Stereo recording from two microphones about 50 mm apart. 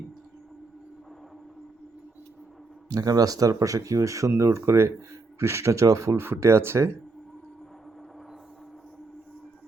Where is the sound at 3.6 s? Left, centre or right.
Right.